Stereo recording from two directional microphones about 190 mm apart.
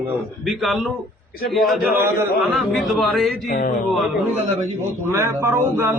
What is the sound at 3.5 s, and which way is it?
Speech, 45° left (ahead or behind).